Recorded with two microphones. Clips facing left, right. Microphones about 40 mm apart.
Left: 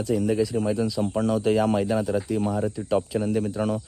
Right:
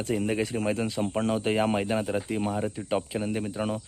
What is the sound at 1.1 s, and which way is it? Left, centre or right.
Speech, right.